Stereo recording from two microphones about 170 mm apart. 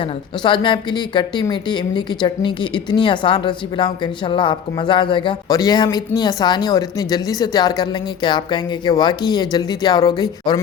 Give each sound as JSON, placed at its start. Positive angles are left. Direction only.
{"t": 0.4, "sound": "speech", "side_deg": 30}